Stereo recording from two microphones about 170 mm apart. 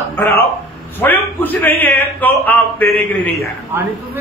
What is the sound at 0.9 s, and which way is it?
A man's voice, 10° left (ahead or behind).